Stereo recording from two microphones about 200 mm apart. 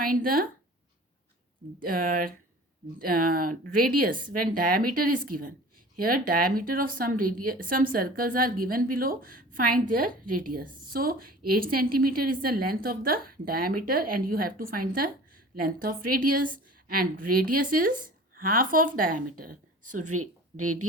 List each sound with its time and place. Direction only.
0.0 s speech: 45° right (ahead or behind)
1.8 s speech: 45° right (ahead or behind)